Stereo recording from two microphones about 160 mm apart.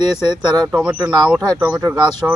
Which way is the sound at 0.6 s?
5° right (ahead or behind).